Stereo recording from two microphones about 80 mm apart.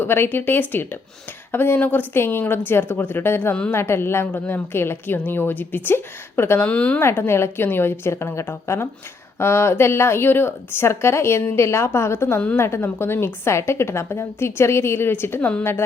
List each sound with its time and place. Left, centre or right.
0.0 s a woman's voice: left
6.7 s a woman's voice: centre
7.0 s a woman's voice: left